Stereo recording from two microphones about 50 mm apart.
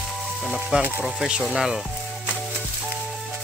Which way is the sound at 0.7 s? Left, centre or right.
Right.